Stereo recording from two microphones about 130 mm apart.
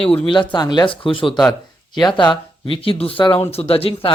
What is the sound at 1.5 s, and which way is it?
Speech, 30° left (ahead or behind).